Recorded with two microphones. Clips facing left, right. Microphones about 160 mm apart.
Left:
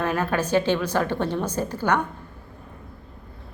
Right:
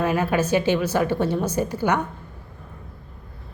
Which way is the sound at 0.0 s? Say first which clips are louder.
Right 3 dB; 10° right (ahead or behind).